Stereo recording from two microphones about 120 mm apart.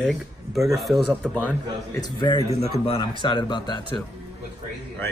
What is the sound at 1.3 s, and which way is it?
Speech, 10° left (ahead or behind).